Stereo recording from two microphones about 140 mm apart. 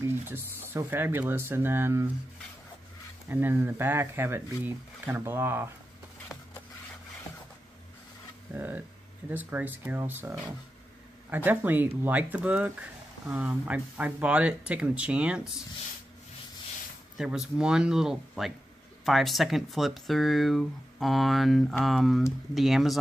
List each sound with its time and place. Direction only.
0.3 s speech: 15° right (ahead or behind)
3.3 s speech: 15° right (ahead or behind)
8.5 s speech: 15° right (ahead or behind)
17.2 s speech: 5° right (ahead or behind)